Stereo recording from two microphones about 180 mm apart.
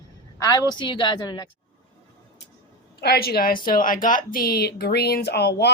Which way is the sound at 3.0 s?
60° left (ahead or behind).